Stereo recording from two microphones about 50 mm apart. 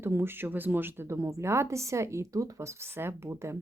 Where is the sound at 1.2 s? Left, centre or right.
Right.